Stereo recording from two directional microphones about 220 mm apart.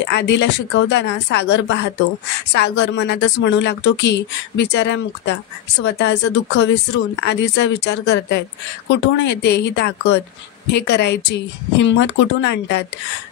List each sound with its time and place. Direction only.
0.0 s speech: 50° left (ahead or behind)